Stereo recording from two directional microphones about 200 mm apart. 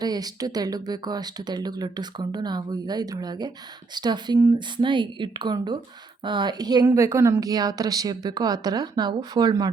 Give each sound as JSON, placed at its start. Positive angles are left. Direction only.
{"t": 0.0, "sound": "speech", "side_deg": -20}